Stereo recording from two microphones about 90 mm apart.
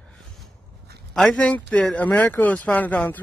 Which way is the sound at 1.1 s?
5° left (ahead or behind).